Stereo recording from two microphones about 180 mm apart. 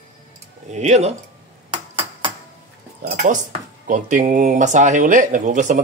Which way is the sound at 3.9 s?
45° right (ahead or behind).